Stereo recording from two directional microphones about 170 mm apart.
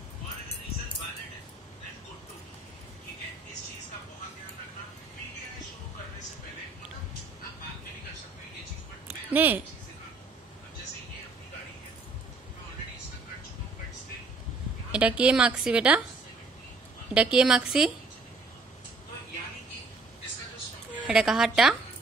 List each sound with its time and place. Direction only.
9.3 s speech: 10° right (ahead or behind)
14.9 s a woman's voice: 5° right (ahead or behind)
17.1 s a woman's voice: 5° right (ahead or behind)
21.1 s a woman's voice: 5° right (ahead or behind)